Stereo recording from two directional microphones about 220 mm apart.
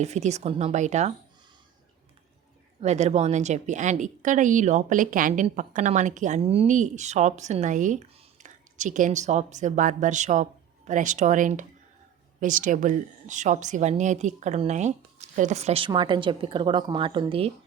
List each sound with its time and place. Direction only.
0.0 s a woman's voice: 30° right (ahead or behind)
2.8 s a woman's voice: 30° right (ahead or behind)